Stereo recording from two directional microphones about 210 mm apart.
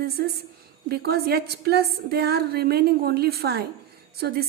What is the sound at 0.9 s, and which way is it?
A woman's voice, 50° right (ahead or behind).